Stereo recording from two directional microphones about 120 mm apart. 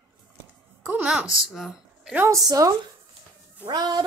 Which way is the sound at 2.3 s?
30° right (ahead or behind).